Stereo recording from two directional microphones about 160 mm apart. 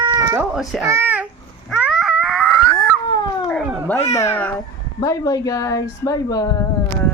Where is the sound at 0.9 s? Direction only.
15° right (ahead or behind).